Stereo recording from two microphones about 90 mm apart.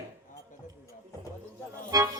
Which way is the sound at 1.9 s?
40° right (ahead or behind).